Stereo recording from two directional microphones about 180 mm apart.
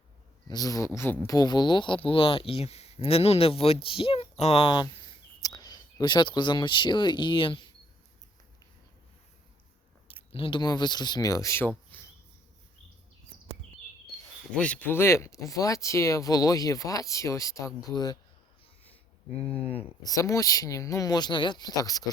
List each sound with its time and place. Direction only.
0.4 s speech: 20° left (ahead or behind)
10.1 s speech: 30° left (ahead or behind); by 11.7 s 15° left (ahead or behind)
11.9 s a sound: 10° left (ahead or behind)
14.5 s speech: 5° left (ahead or behind)
19.4 s speech: 30° left (ahead or behind)
20.1 s speech: 20° left (ahead or behind)